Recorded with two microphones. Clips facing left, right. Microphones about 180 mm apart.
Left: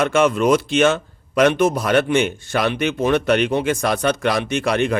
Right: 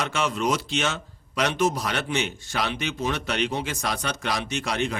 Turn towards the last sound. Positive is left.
turn(degrees=60)  # may be behind; listen again after turning